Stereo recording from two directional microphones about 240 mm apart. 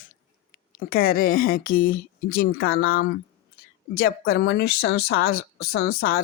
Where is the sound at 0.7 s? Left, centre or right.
Left.